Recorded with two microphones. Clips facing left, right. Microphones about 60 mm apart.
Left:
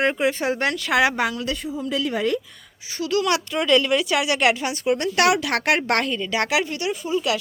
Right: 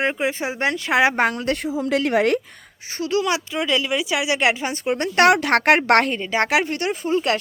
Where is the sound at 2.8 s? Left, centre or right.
Right.